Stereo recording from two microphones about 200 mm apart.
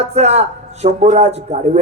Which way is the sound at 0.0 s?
30° right (ahead or behind).